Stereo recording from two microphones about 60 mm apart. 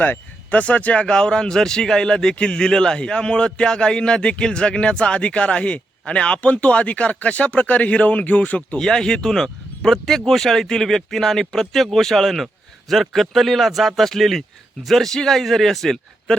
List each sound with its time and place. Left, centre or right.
0.0 s speech: left
1.0 s a man's voice: centre
8.8 s speech: centre